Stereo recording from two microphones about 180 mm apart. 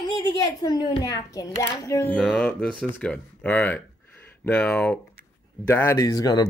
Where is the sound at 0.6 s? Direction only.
25° left (ahead or behind).